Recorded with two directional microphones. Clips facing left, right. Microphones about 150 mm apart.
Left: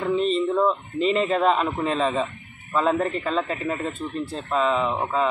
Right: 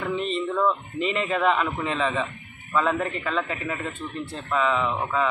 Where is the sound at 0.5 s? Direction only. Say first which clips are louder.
Left 2 dB; 20° left (ahead or behind).